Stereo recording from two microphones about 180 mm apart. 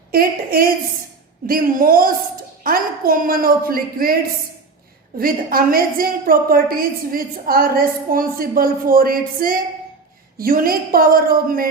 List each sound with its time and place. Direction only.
0.1 s a woman's voice: 55° right (ahead or behind)